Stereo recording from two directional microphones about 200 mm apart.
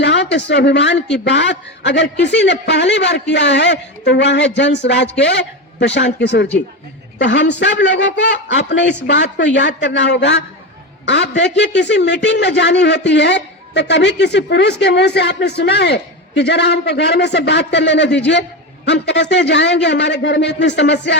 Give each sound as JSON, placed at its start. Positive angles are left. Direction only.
{"t": 0.0, "sound": "a man's voice", "side_deg": 60}